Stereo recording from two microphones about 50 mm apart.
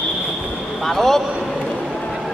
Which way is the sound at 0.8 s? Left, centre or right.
Centre.